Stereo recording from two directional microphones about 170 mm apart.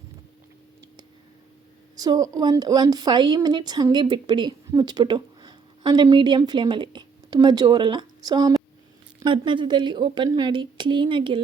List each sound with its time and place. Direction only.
2.0 s a woman's voice: 20° right (ahead or behind)